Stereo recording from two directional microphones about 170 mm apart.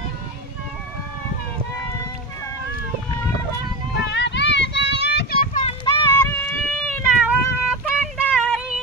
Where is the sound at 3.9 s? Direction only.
90° left; by 5.6 s 60° left (ahead or behind).